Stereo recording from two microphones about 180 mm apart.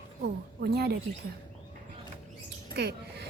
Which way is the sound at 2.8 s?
65° right (ahead or behind).